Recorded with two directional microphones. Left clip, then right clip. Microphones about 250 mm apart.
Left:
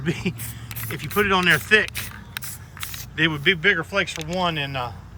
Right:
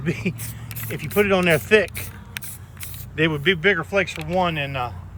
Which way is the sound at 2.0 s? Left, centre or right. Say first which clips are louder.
Left 2 dB; centre.